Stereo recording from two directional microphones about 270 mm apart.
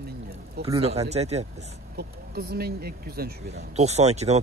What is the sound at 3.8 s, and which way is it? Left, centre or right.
Speech, right.